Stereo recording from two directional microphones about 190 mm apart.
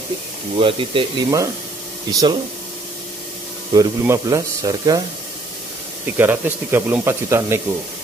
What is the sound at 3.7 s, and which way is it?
Speech, 20° right (ahead or behind).